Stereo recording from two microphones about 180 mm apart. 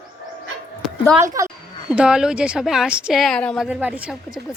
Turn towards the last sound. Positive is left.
turn(degrees=-5)  # may be behind; listen again after turning